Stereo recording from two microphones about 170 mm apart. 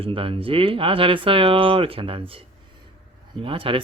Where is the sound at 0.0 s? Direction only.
35° right (ahead or behind).